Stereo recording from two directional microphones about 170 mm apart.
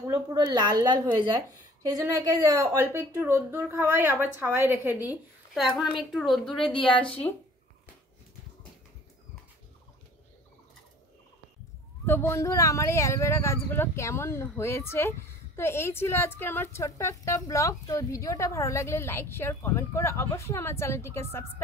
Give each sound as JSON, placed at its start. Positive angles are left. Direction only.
{"t": 0.1, "sound": "a woman's voice", "side_deg": -20}
{"t": 6.6, "sound": "speech", "side_deg": 30}
{"t": 12.1, "sound": "a woman's voice", "side_deg": 15}